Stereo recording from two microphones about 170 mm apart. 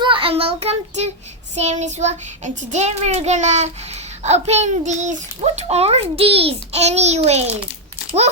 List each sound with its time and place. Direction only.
0.0 s child singing: 30° right (ahead or behind)
1.5 s a child's voice: 45° right (ahead or behind)